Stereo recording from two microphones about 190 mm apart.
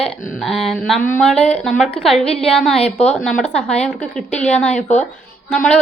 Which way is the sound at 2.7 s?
35° left (ahead or behind).